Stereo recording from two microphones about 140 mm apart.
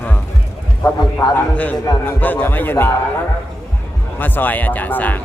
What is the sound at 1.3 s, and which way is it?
Speech, 10° left (ahead or behind).